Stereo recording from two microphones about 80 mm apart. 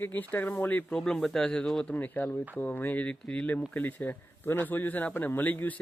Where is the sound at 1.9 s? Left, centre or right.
Left.